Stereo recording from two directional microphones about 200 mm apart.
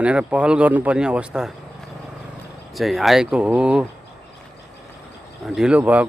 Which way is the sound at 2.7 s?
Centre (ahead or behind).